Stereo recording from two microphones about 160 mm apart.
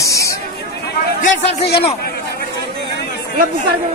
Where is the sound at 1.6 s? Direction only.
90° left.